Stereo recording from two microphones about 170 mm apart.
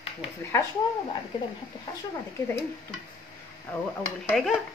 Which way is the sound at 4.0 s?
5° left (ahead or behind).